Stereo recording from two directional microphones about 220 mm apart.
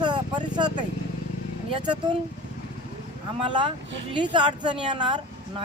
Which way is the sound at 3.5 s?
20° right (ahead or behind).